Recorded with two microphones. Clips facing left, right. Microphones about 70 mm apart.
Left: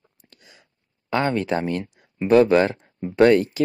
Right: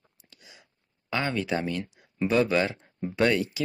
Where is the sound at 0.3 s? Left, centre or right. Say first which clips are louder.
Left 1 dB; left.